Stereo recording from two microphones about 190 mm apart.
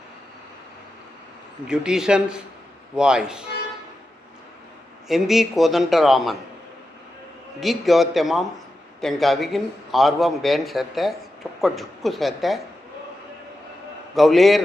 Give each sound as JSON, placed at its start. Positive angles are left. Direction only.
{"t": 1.6, "sound": "a man's voice", "side_deg": -5}
{"t": 5.0, "sound": "a man's voice", "side_deg": 0}
{"t": 7.6, "sound": "a man's voice", "side_deg": 0}
{"t": 14.2, "sound": "a man's voice", "side_deg": 0}